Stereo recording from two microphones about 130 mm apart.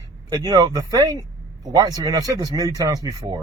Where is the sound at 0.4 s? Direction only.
30° right (ahead or behind).